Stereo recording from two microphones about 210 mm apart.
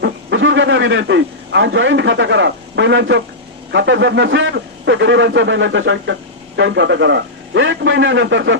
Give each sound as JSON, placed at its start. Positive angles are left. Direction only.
{"t": 0.0, "sound": "a man's voice", "side_deg": -60}